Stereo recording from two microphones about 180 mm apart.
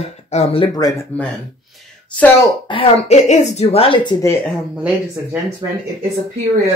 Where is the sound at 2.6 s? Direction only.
30° left (ahead or behind).